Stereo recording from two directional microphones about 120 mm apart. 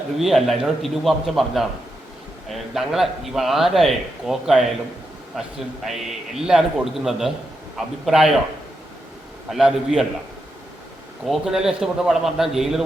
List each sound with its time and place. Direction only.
0.2 s speech: centre (ahead or behind)
9.5 s speech: 5° right (ahead or behind)
11.3 s speech: 5° right (ahead or behind)